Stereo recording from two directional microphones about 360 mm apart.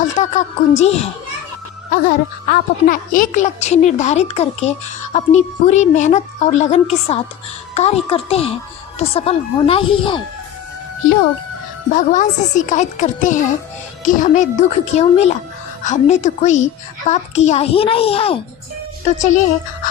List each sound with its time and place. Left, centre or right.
0.0 s a woman's voice: centre
11.9 s a woman's voice: left